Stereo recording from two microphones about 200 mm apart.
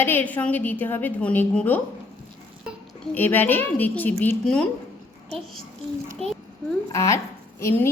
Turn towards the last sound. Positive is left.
turn(degrees=15)  # may be behind; listen again after turning